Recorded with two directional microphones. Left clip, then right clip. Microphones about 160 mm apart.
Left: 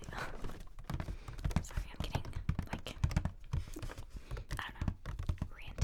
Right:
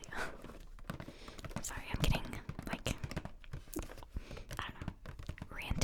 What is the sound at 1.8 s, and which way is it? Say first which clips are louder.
Whispering: right 8 dB; 50° right (ahead or behind).